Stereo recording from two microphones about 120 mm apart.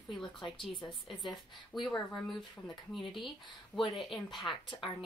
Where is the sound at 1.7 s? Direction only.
40° left (ahead or behind).